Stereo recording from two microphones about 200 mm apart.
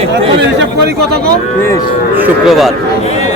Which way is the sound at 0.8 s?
55° right (ahead or behind).